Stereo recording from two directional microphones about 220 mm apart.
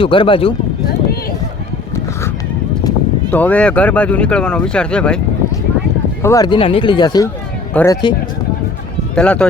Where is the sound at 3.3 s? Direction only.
5° left (ahead or behind).